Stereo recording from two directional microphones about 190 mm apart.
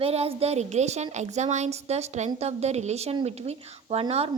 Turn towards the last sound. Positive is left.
turn(degrees=-30)  # may be behind; listen again after turning